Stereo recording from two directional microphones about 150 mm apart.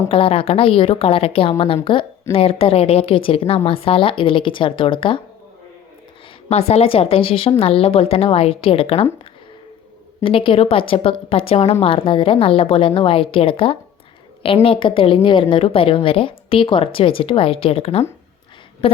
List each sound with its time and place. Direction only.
0.1 s a woman's voice: 40° left (ahead or behind)
6.5 s a woman's voice: 45° left (ahead or behind)
10.2 s a woman's voice: 35° left (ahead or behind)